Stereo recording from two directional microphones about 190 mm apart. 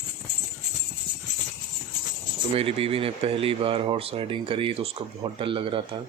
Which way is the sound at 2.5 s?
30° right (ahead or behind).